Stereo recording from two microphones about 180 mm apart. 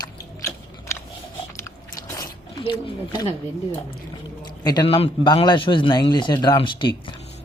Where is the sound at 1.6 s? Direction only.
15° left (ahead or behind).